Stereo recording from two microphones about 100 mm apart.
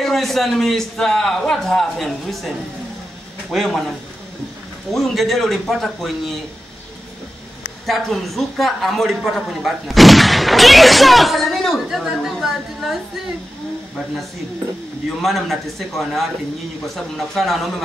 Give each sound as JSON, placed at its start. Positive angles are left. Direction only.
{"t": 0.0, "sound": "a man's voice", "side_deg": 0}
{"t": 4.9, "sound": "a man's voice", "side_deg": 0}
{"t": 7.8, "sound": "a man's voice", "side_deg": 0}
{"t": 15.2, "sound": "a man's voice", "side_deg": 0}